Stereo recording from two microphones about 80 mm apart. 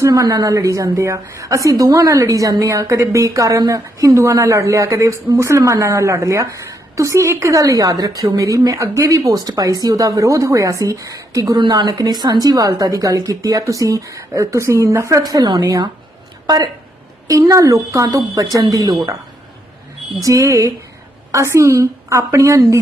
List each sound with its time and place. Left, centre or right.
0.0 s a woman's voice: right
9.3 s a woman's voice: right
11.5 s a woman's voice: right
15.2 s a woman's voice: right
17.2 s a woman's voice: right
20.2 s a woman's voice: right